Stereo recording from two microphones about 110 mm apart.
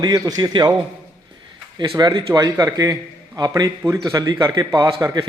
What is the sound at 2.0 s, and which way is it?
A man's voice, 35° right (ahead or behind).